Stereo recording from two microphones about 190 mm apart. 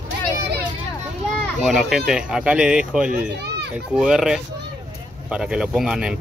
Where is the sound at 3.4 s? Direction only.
60° right (ahead or behind).